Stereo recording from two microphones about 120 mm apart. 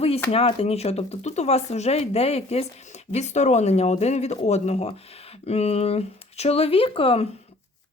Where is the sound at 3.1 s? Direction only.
70° left (ahead or behind).